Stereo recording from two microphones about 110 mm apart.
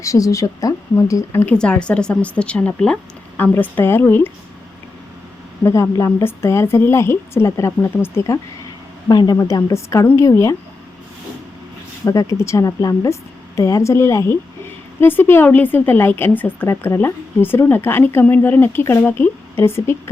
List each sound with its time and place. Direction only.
0.0 s a woman's voice: 30° left (ahead or behind)
1.5 s a woman's voice: 10° left (ahead or behind)
5.6 s a woman's voice: 25° left (ahead or behind)
9.0 s a woman's voice: 40° left (ahead or behind)
12.0 s a woman's voice: 30° left (ahead or behind)